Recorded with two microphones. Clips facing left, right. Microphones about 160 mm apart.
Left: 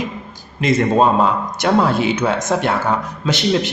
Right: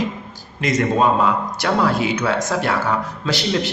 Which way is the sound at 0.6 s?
30° left (ahead or behind).